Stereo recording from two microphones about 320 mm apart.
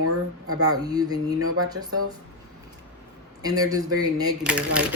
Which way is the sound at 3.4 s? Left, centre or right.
Centre.